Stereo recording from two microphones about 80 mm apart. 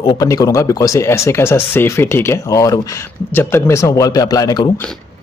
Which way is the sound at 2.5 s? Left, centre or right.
Left.